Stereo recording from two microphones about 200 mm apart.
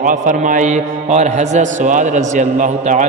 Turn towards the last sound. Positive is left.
turn(degrees=-40)  # may be behind; listen again after turning